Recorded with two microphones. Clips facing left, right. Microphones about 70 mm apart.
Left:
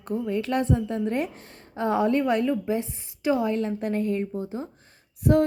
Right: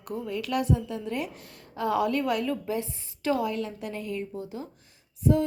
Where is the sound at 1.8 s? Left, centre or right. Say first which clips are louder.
Left 3 dB; left.